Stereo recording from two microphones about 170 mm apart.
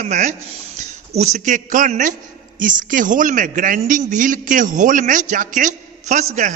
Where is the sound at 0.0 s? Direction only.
45° right (ahead or behind).